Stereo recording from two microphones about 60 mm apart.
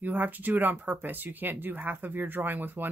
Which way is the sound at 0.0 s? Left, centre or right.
Right.